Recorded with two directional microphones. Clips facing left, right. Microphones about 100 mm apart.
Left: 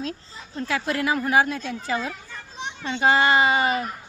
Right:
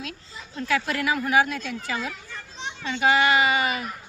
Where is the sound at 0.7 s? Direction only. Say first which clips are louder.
Even; 25° left (ahead or behind).